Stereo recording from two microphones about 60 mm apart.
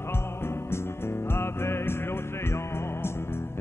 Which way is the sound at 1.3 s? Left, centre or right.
Left.